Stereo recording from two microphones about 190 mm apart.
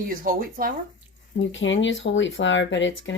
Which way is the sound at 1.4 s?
75° left (ahead or behind).